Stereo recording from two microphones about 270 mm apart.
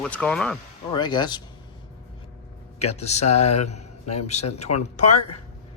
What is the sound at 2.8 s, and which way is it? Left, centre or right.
Speech, left.